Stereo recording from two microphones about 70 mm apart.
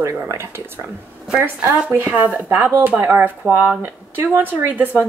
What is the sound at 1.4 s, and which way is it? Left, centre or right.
Speech, right.